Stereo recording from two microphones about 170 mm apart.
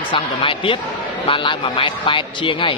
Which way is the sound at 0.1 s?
30° left (ahead or behind).